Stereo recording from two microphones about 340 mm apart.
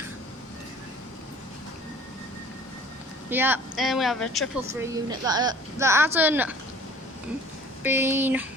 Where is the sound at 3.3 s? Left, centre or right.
Centre.